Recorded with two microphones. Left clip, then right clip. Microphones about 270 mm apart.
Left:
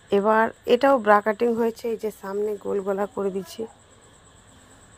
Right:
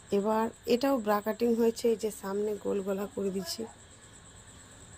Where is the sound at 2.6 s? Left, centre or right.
Left.